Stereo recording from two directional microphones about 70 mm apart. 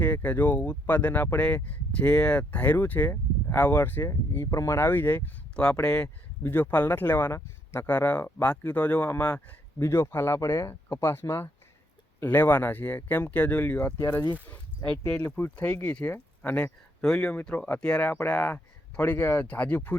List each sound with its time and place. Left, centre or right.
0.0 s speech: left
4.5 s speech: left
4.8 s speech: left
5.8 s speech: centre
6.4 s speech: left
9.7 s speech: left
12.2 s speech: left
13.7 s speech: left
15.0 s speech: left
16.1 s a sound: left
17.0 s speech: centre
18.1 s speech: left